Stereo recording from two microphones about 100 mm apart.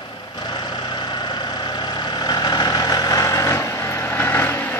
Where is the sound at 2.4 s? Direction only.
40° left (ahead or behind).